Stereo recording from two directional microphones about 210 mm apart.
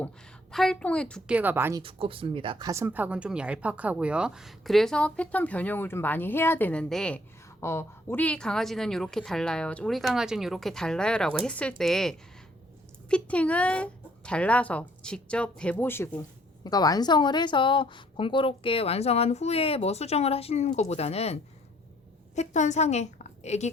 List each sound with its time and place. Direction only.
0.5 s speech: centre (ahead or behind)
1.4 s speech: 10° right (ahead or behind)
1.8 s a woman's voice: 25° right (ahead or behind); by 21.3 s 30° left (ahead or behind)
22.4 s a woman's voice: 35° left (ahead or behind)